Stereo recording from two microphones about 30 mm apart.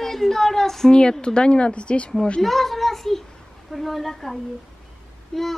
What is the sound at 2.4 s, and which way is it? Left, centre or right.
A child's voice, centre.